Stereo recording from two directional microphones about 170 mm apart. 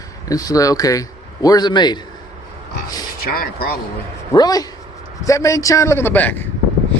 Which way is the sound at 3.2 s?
65° left (ahead or behind).